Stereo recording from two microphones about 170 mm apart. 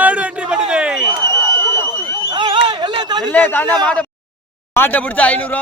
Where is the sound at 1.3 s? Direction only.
15° left (ahead or behind).